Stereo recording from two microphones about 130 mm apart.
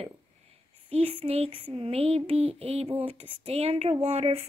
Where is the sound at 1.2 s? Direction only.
45° right (ahead or behind).